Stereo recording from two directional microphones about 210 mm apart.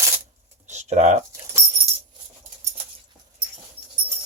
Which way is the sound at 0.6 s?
35° right (ahead or behind).